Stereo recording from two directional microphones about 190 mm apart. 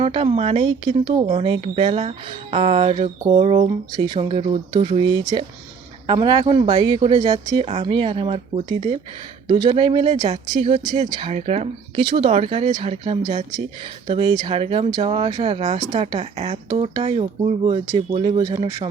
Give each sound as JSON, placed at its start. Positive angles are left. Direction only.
{"t": 0.0, "sound": "speech", "side_deg": -30}
{"t": 3.9, "sound": "speech", "side_deg": -20}